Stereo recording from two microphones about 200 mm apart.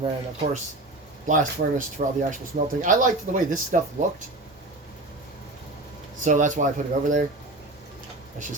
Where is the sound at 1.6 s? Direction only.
50° right (ahead or behind).